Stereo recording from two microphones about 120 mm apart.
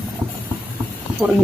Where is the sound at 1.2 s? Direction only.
5° left (ahead or behind).